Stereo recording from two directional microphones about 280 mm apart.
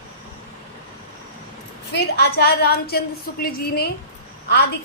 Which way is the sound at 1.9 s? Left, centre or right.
Left.